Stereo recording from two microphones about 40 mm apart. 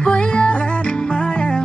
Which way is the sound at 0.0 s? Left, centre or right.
Left.